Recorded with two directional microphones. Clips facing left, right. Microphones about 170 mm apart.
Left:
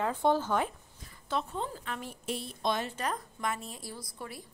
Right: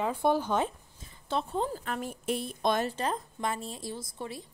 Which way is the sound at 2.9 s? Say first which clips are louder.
Right 3 dB; 30° right (ahead or behind).